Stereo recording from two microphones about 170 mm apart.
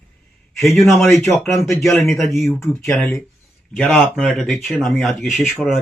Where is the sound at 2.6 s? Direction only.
15° left (ahead or behind).